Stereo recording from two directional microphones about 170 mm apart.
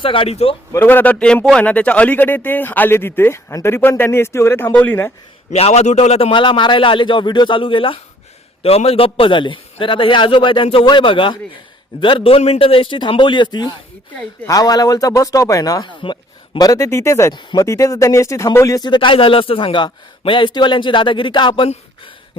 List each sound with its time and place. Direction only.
0.0 s a man's voice: 30° left (ahead or behind)
0.7 s a man's voice: 10° left (ahead or behind)
5.5 s a man's voice: 40° left (ahead or behind)